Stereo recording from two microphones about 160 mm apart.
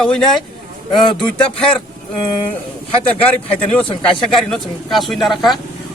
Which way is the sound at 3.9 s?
30° left (ahead or behind).